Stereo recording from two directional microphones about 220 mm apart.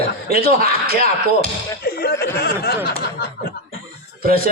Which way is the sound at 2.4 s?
45° left (ahead or behind).